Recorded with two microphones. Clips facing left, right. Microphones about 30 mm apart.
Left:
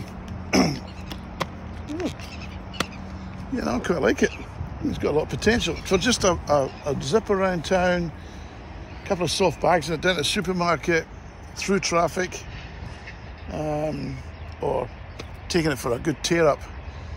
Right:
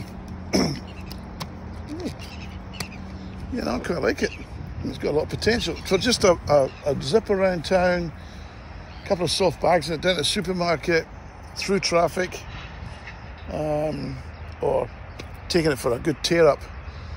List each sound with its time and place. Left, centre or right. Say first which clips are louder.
1.9 s speech: left 4 dB; left
2.7 s a sound: left 7 dB; left
3.2 s speech: left 1 dB; right
13.5 s speech: right 2 dB; right
13.9 s speech: even; right
14.6 s speech: right 3 dB; centre
15.1 s speech: right 1 dB; right